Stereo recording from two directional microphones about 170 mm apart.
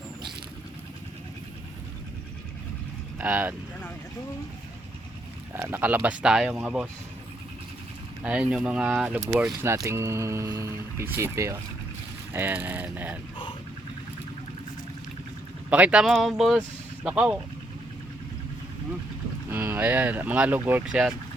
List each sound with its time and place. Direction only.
3.2 s speech: 10° right (ahead or behind)
5.5 s speech: 10° right (ahead or behind)
8.2 s speech: 5° right (ahead or behind)
15.7 s speech: 5° right (ahead or behind)
19.5 s speech: 15° right (ahead or behind)